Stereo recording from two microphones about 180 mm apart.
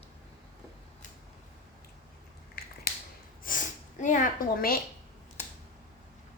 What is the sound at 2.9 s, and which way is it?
Finger snapping, 55° left (ahead or behind).